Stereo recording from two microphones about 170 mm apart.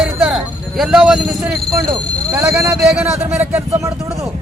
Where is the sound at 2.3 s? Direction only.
15° right (ahead or behind).